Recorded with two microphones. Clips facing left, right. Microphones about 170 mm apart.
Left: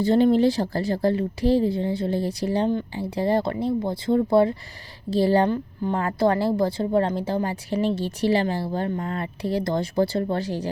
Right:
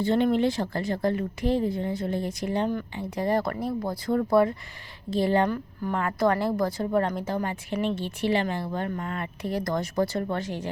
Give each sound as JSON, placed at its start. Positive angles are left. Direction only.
{"t": 0.0, "sound": "a woman's voice", "side_deg": 35}